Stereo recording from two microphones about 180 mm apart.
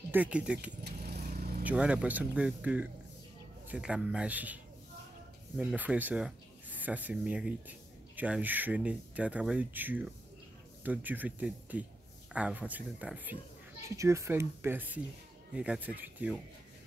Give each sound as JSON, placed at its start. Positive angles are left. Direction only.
{"t": 0.1, "sound": "speech", "side_deg": -5}
{"t": 0.8, "sound": "vehicle", "side_deg": -65}
{"t": 1.6, "sound": "a man's voice", "side_deg": -10}
{"t": 5.6, "sound": "speech", "side_deg": -5}